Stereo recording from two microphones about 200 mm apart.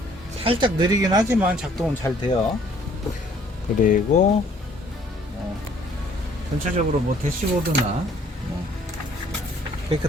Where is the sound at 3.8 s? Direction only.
40° left (ahead or behind).